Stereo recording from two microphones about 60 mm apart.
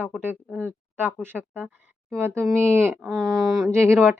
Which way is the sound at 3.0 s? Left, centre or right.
Centre.